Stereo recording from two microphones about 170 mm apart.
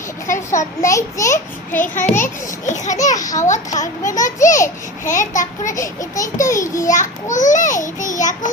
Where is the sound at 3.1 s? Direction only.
20° left (ahead or behind).